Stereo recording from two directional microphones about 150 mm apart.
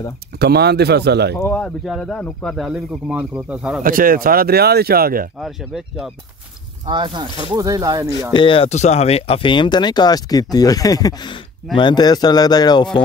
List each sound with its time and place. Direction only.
0.4 s speech: 90° right
1.3 s speech: 15° left (ahead or behind)
1.9 s speech: centre (ahead or behind)
3.8 s speech: 70° right (ahead or behind)
5.4 s speech: 5° right (ahead or behind)
6.9 s speech: 30° right (ahead or behind)
8.3 s speech: 35° left (ahead or behind)